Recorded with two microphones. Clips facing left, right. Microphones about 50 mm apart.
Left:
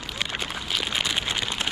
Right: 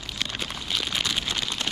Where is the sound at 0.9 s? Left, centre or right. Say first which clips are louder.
Left 2 dB; centre.